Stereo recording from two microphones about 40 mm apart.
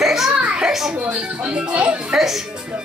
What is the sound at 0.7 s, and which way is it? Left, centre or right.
Speech, centre.